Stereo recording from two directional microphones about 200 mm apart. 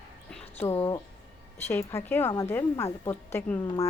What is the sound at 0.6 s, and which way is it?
A woman's voice, 10° left (ahead or behind).